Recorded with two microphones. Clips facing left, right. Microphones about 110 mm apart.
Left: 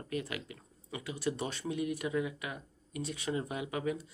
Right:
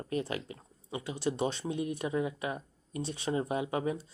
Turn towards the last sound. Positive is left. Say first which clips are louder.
# right 3 dB
turn(degrees=-30)  # may be behind; listen again after turning